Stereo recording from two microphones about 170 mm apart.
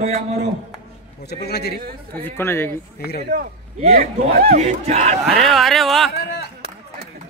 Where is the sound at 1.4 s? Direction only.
70° left (ahead or behind).